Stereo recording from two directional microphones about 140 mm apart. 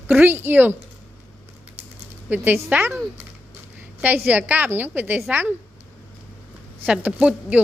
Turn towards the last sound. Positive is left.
turn(degrees=-10)  # may be behind; listen again after turning